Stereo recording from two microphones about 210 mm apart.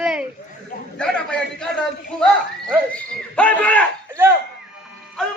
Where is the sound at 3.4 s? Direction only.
5° left (ahead or behind).